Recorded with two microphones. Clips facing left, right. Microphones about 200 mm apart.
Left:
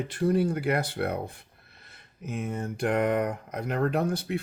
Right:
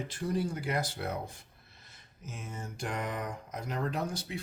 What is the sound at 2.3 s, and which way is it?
Speech, 60° left (ahead or behind).